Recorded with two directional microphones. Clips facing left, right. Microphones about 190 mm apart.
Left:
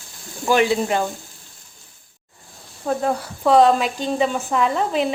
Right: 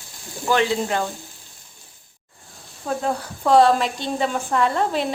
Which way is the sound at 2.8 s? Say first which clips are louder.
Left 3 dB; 5° left (ahead or behind).